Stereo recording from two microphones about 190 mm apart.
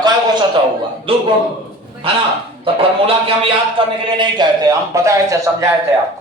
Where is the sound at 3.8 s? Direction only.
25° right (ahead or behind).